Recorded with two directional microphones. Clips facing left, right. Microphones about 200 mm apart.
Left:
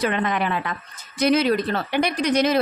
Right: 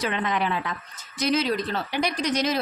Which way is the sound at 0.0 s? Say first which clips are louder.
Left 3 dB; 55° left (ahead or behind).